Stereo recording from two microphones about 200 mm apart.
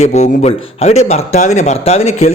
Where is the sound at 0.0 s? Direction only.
35° left (ahead or behind).